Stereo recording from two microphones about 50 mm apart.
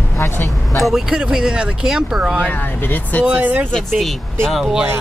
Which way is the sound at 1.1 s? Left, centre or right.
Centre.